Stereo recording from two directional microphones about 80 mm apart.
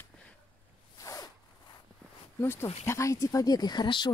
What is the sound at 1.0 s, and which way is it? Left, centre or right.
Zipper, left.